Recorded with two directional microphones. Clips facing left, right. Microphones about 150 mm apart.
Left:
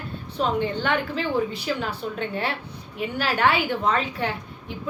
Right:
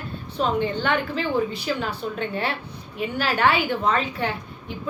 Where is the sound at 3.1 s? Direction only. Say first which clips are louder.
Right 1 dB; 10° left (ahead or behind).